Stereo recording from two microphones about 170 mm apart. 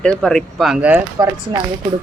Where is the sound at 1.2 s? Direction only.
20° right (ahead or behind).